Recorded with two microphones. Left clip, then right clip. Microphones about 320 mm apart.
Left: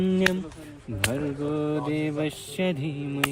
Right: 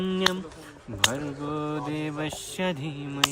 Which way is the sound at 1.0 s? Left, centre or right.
Centre.